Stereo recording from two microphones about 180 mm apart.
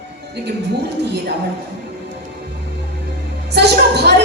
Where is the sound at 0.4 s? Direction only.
70° right (ahead or behind).